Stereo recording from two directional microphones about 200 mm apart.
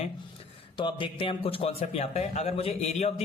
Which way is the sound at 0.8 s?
25° left (ahead or behind).